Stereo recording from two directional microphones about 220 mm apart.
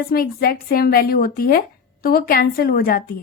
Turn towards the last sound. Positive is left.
turn(degrees=40)  # may be behind; listen again after turning